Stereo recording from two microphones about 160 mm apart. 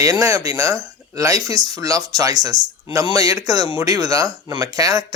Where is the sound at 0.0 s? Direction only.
20° right (ahead or behind).